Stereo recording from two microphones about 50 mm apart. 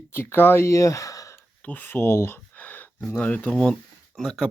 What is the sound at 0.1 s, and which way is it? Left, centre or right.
Speech, left.